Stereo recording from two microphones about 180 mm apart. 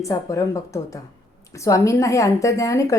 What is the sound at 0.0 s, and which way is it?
Speech, 15° left (ahead or behind).